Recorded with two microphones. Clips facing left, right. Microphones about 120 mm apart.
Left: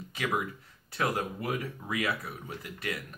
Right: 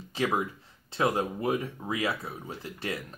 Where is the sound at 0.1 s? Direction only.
30° right (ahead or behind).